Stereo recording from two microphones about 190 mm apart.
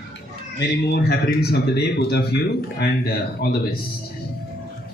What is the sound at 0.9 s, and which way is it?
Speech, 60° left (ahead or behind).